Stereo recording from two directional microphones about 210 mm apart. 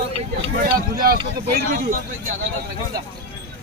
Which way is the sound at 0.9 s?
45° right (ahead or behind).